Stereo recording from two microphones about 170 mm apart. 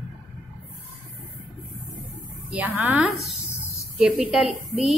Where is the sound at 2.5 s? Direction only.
10° right (ahead or behind).